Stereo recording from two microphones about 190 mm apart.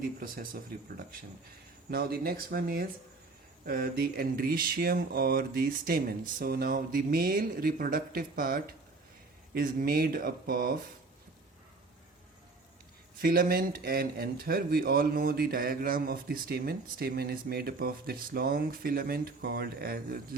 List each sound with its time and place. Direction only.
0.0 s speech: 50° right (ahead or behind)
13.2 s speech: 50° right (ahead or behind)